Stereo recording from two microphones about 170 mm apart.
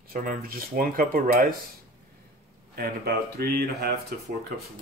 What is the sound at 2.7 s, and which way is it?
Speech, 65° right (ahead or behind).